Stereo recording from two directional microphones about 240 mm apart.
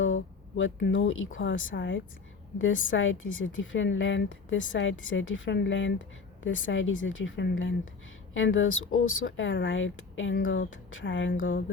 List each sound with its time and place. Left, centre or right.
0.0 s a woman's voice: left